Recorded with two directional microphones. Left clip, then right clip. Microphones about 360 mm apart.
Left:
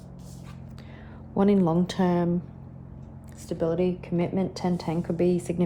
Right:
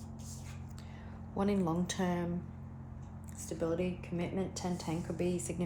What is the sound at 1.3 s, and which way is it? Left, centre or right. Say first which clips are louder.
Speech: left 11 dB; left.